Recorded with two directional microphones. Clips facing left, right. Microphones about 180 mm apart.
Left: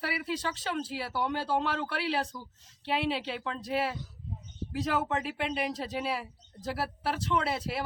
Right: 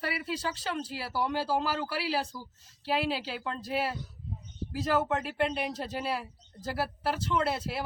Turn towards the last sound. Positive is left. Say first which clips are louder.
# right 1 dB
turn(degrees=0)  # may be behind; listen again after turning